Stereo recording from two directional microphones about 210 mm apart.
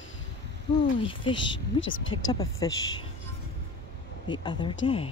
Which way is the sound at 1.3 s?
65° left (ahead or behind).